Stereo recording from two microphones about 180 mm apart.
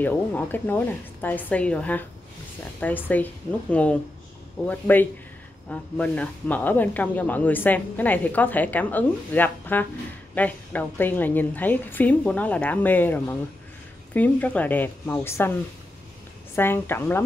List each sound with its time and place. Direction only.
0.0 s speech: 10° left (ahead or behind)
16.5 s speech: 10° left (ahead or behind)